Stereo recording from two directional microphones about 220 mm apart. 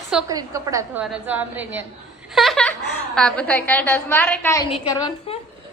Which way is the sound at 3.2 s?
5° left (ahead or behind).